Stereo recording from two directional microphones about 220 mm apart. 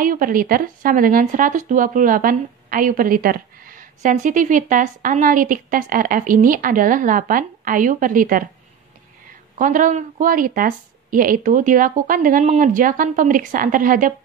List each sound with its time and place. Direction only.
0.0 s a woman's voice: 40° right (ahead or behind)
9.6 s a woman's voice: 35° right (ahead or behind)